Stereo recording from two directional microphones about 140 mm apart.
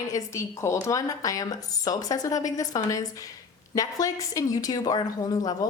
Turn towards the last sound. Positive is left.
turn(degrees=30)  # may be behind; listen again after turning